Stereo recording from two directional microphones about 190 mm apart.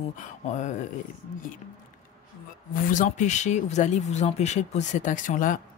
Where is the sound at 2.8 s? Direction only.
40° left (ahead or behind).